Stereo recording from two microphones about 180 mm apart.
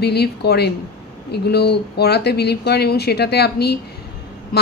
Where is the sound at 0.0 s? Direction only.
65° left (ahead or behind).